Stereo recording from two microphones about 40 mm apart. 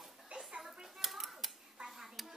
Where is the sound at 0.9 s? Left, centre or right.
Centre.